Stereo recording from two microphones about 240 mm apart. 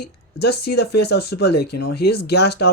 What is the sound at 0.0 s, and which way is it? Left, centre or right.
Speech, left.